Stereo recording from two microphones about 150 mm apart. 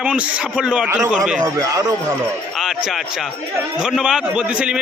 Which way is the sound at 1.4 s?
25° right (ahead or behind).